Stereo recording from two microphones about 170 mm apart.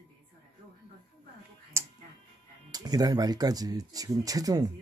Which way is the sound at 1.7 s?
15° right (ahead or behind).